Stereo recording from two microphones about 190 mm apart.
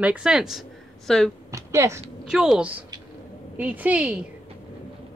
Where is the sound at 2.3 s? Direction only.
5° right (ahead or behind).